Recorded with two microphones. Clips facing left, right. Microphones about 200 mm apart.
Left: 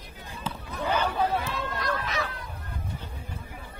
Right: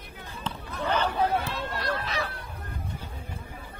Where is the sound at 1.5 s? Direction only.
30° right (ahead or behind).